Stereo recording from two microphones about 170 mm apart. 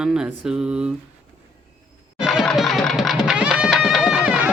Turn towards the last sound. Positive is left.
turn(degrees=-5)  # may be behind; listen again after turning